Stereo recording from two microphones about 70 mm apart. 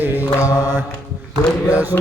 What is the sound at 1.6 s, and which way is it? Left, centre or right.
Mantra, right.